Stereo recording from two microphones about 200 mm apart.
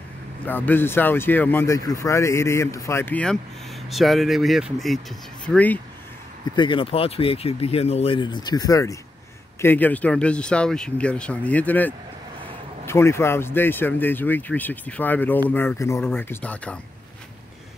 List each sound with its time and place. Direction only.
0.5 s speech: 10° left (ahead or behind)
6.5 s speech: 25° left (ahead or behind); by 16.8 s 5° left (ahead or behind)